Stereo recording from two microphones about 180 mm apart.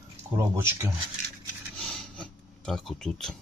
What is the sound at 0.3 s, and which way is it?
Speech, 15° right (ahead or behind).